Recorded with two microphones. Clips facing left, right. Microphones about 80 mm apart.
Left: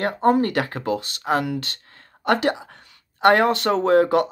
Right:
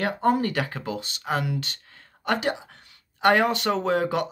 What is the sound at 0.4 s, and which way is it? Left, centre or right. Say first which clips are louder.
Speech: left 5 dB; left.